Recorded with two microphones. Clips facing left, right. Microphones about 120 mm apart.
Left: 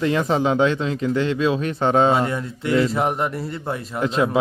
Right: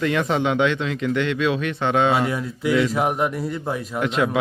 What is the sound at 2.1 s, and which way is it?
Speech, 5° right (ahead or behind).